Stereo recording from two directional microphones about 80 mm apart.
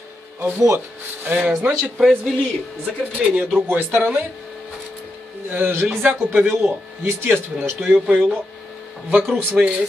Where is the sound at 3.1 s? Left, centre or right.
Centre.